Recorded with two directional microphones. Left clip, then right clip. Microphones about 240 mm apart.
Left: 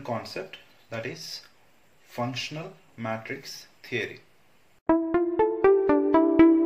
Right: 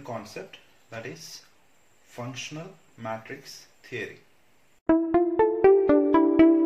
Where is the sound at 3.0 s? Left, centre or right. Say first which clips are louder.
Left 2 dB; left.